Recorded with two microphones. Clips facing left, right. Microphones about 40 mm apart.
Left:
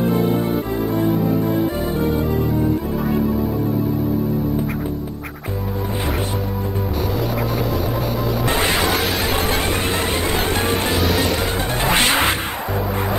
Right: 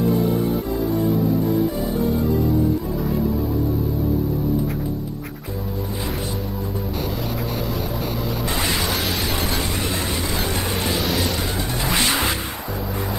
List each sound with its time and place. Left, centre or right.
0.0 s music: left
8.5 s music: left
8.9 s music: centre
9.5 s music: left
11.0 s music: centre
11.3 s music: left